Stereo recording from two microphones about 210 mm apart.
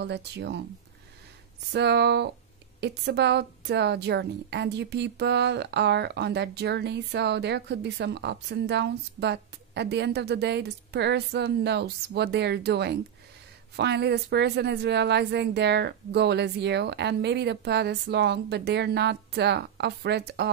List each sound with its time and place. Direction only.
0.0 s a woman's voice: 55° right (ahead or behind)
1.7 s a woman's voice: 55° right (ahead or behind)